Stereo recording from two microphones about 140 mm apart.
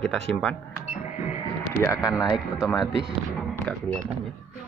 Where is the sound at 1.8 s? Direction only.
20° left (ahead or behind).